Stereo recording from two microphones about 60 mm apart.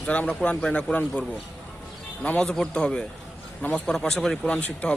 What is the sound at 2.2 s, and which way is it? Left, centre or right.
Speech, centre.